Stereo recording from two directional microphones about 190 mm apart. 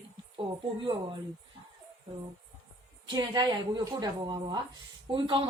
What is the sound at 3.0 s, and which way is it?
Speech, 20° right (ahead or behind).